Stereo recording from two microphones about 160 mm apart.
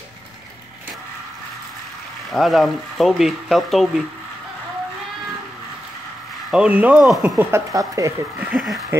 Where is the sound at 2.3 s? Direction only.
Centre (ahead or behind).